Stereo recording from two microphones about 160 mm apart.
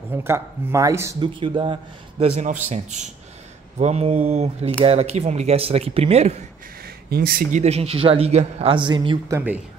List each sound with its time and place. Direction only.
0.2 s speech: 15° right (ahead or behind)
1.2 s a man's voice: 30° right (ahead or behind)
7.1 s speech: 70° right (ahead or behind)
7.6 s a man's voice: 40° right (ahead or behind)